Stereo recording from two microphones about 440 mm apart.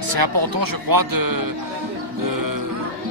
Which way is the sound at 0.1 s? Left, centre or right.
Right.